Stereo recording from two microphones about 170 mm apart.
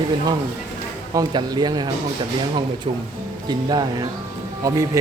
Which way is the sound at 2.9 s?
35° right (ahead or behind).